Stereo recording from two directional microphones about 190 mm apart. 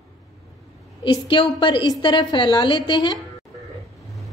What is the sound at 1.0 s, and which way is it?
A woman's voice, 25° left (ahead or behind).